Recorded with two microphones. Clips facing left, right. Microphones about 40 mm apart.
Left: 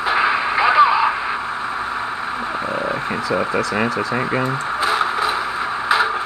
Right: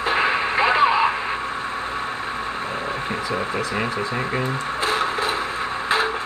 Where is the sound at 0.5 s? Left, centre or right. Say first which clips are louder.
Left 4 dB; right.